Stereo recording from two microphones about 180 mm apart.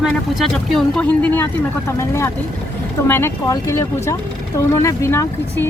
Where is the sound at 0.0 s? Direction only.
Centre (ahead or behind).